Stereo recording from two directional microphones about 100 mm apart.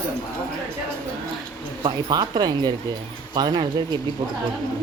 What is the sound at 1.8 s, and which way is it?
Speech, 45° right (ahead or behind).